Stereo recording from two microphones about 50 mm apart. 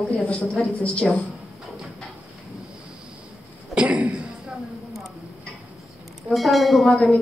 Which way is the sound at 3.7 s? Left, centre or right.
Right.